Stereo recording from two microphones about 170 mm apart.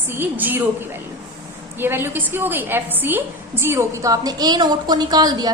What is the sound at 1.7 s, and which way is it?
A woman's voice, 15° right (ahead or behind).